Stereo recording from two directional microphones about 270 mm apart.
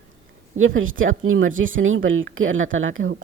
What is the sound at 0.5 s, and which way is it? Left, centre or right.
Speech, right.